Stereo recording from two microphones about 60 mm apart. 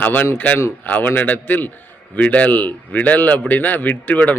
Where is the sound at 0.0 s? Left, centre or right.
Left.